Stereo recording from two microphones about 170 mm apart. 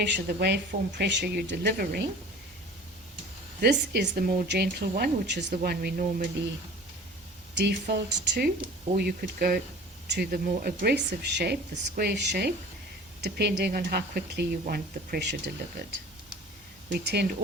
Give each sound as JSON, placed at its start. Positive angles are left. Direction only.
{"t": 0.0, "sound": "speech", "side_deg": -75}
{"t": 3.6, "sound": "speech", "side_deg": -80}
{"t": 5.6, "sound": "speech", "side_deg": -60}
{"t": 7.5, "sound": "speech", "side_deg": -90}
{"t": 9.0, "sound": "speech", "side_deg": -65}
{"t": 17.0, "sound": "speech", "side_deg": -75}